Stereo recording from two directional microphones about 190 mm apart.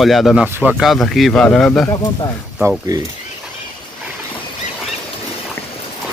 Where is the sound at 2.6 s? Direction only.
15° right (ahead or behind).